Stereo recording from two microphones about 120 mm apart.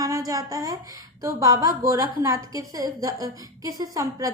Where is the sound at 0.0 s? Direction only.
30° right (ahead or behind).